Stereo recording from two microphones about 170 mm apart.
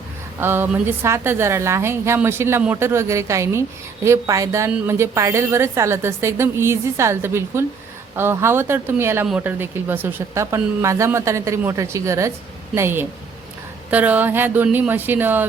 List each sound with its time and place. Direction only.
0.3 s a woman's voice: 15° right (ahead or behind)